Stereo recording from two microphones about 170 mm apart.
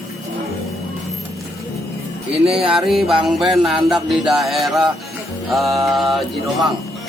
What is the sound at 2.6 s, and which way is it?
Speech, centre (ahead or behind).